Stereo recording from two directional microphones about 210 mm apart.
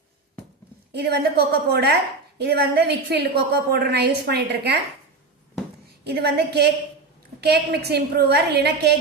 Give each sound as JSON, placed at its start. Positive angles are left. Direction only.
{"t": 0.9, "sound": "a woman's voice", "side_deg": -50}
{"t": 6.1, "sound": "a woman's voice", "side_deg": -50}